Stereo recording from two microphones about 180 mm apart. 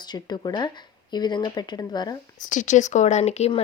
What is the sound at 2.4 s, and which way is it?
Speech, 45° left (ahead or behind).